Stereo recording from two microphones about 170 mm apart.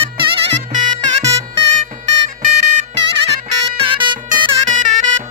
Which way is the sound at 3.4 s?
30° right (ahead or behind).